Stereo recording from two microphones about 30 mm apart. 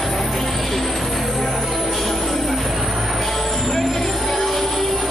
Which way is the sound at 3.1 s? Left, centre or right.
Centre.